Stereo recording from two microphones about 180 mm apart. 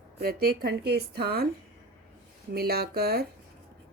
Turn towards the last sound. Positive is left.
turn(degrees=-60)  # may be behind; listen again after turning